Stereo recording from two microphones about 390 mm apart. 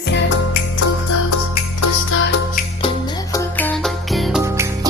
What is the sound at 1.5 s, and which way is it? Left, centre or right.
Music, left.